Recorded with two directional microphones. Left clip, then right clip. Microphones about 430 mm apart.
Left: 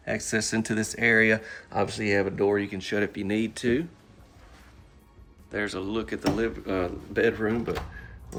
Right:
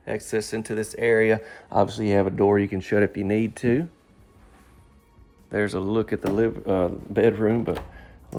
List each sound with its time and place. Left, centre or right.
0.0 s speech: centre
5.5 s speech: centre